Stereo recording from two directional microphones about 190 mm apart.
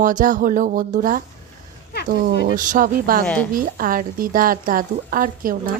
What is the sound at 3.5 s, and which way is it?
Speech, 50° right (ahead or behind).